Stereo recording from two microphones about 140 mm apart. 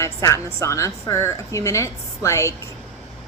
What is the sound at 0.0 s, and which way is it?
A woman's voice, 20° left (ahead or behind).